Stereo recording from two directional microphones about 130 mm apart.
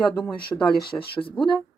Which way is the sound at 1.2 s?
40° left (ahead or behind).